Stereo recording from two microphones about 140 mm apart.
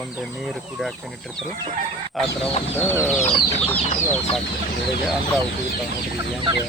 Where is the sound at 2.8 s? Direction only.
15° left (ahead or behind).